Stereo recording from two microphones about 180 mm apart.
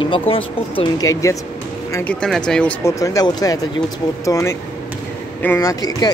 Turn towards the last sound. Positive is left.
turn(degrees=20)  # may be behind; listen again after turning